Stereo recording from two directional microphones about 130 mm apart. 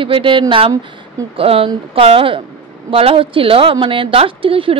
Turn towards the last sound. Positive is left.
turn(degrees=-45)  # may be behind; listen again after turning